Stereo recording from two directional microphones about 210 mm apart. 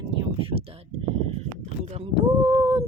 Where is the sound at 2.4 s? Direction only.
15° right (ahead or behind).